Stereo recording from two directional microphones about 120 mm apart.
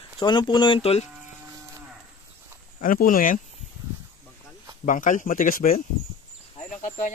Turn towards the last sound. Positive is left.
turn(degrees=90)